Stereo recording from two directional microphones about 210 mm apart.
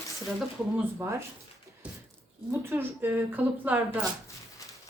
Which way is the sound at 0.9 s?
15° right (ahead or behind).